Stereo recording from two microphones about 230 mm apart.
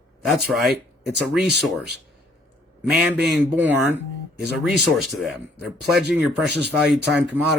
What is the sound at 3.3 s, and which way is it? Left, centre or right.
Speech, centre.